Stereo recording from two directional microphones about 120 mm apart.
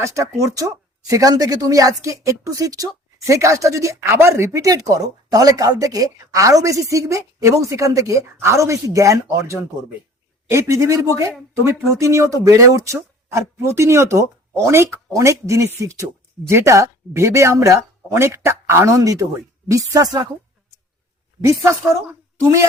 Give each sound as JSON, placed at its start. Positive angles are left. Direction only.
{"t": 0.0, "sound": "speech", "side_deg": -25}
{"t": 21.4, "sound": "speech", "side_deg": -25}